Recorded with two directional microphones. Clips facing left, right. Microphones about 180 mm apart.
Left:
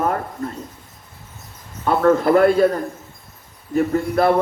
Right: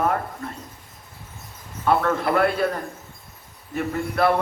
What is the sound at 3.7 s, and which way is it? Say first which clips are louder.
Speech: left 6 dB; 40° left (ahead or behind).